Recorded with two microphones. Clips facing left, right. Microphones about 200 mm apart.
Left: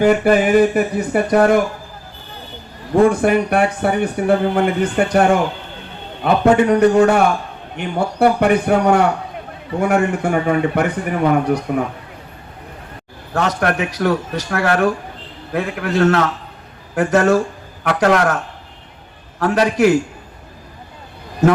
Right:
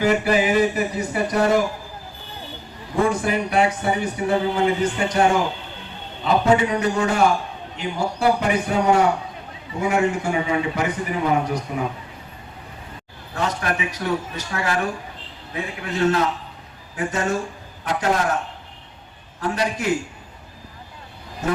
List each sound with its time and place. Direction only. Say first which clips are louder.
0.0 s speech: left 6 dB; 50° left (ahead or behind)
2.9 s a man's voice: left 8 dB; 55° left (ahead or behind)
13.3 s a man's voice: left 6 dB; 70° left (ahead or behind)
19.4 s a man's voice: left 9 dB; 70° left (ahead or behind)